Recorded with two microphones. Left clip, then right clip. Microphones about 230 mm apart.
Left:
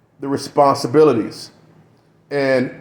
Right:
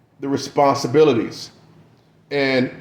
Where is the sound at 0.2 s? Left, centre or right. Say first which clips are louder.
Left 2 dB; left.